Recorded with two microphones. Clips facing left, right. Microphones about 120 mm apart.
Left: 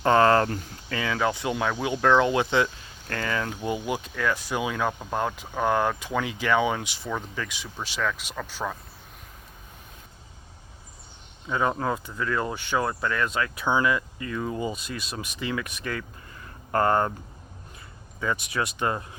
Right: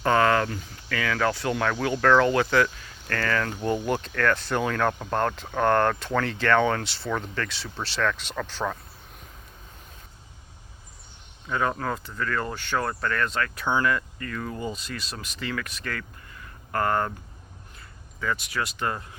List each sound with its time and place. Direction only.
0.0 s speech: 30° left (ahead or behind)
0.9 s speech: 20° left (ahead or behind)
11.4 s speech: 15° left (ahead or behind)
16.4 s a sound: 25° left (ahead or behind)
18.2 s speech: 20° left (ahead or behind)